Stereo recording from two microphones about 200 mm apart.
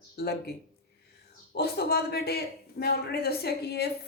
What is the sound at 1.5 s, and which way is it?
Speech, 55° left (ahead or behind).